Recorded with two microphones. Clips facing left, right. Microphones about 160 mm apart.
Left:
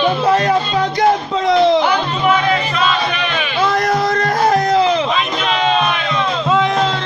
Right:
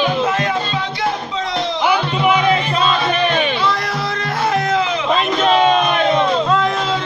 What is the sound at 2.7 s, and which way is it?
Music, 40° right (ahead or behind).